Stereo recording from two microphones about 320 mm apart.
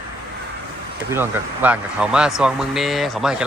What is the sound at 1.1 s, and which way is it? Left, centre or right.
Speech, centre.